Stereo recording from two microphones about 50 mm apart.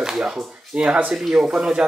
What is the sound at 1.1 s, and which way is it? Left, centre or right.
Speech, centre.